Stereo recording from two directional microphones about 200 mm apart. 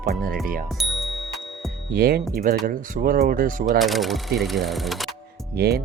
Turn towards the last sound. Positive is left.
turn(degrees=-50)  # may be behind; listen again after turning